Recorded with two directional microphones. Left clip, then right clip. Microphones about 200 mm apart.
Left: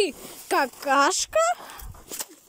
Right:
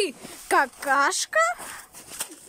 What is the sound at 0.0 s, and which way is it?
Speech, centre (ahead or behind).